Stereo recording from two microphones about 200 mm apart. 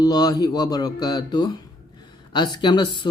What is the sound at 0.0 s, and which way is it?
Speech, 20° left (ahead or behind).